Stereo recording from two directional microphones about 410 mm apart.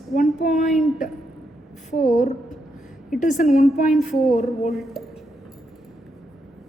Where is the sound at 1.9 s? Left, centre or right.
Centre.